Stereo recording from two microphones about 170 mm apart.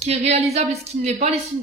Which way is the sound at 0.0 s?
40° right (ahead or behind).